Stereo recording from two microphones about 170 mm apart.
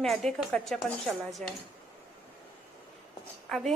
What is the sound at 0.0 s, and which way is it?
Speech, centre (ahead or behind).